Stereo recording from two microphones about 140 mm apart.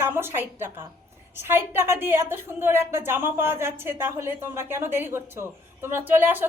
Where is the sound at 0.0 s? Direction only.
15° right (ahead or behind).